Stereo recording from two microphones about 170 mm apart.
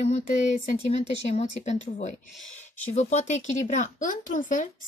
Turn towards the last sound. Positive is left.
turn(degrees=50)  # may be behind; listen again after turning